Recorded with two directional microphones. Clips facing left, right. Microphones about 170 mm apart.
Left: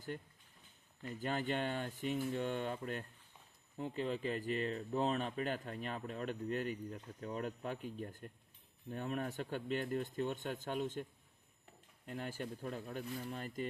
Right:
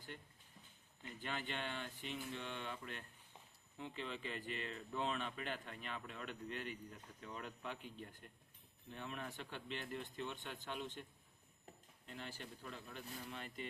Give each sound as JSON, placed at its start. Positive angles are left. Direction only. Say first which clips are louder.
{"t": 1.0, "sound": "speech", "louder": "left 8 dB", "side_deg": 40}
{"t": 12.0, "sound": "speech", "louder": "left 8 dB", "side_deg": 45}